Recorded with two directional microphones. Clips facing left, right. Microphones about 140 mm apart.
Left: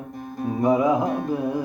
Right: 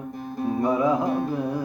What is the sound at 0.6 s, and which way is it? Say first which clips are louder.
Music: left 3 dB; 20° left (ahead or behind).